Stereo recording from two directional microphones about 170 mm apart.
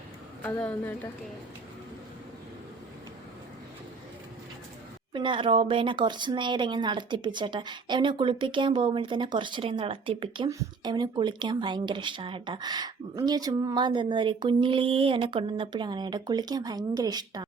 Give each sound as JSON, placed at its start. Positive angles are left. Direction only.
{"t": 0.4, "sound": "a woman's voice", "side_deg": 10}
{"t": 5.1, "sound": "speech", "side_deg": -30}